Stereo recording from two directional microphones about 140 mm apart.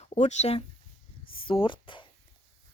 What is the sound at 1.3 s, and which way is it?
Chopping, 40° left (ahead or behind).